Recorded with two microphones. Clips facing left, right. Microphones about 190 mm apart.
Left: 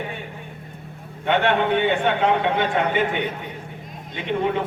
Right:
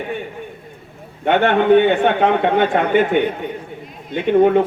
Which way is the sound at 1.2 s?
50° right (ahead or behind).